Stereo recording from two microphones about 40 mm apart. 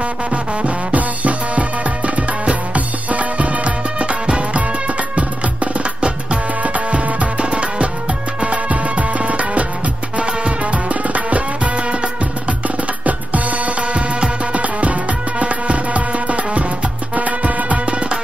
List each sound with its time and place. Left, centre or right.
0.3 s music: right